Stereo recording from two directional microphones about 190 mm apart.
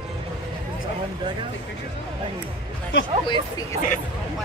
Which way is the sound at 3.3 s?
20° left (ahead or behind).